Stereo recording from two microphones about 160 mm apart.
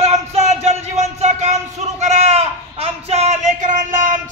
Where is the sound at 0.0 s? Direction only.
40° right (ahead or behind).